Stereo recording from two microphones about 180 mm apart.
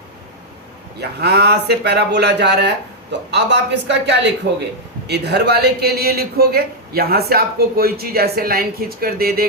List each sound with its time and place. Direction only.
1.2 s a man's voice: 65° right (ahead or behind)